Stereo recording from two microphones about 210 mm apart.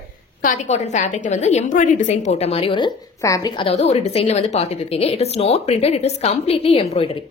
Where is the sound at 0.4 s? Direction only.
35° left (ahead or behind).